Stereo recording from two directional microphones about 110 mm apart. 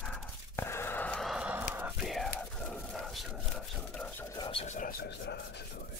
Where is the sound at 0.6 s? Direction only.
20° left (ahead or behind).